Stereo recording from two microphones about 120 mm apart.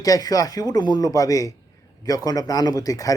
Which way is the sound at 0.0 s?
30° left (ahead or behind).